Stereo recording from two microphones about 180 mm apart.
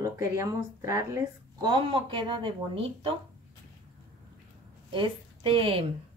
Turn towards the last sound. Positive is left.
turn(degrees=-30)  # may be behind; listen again after turning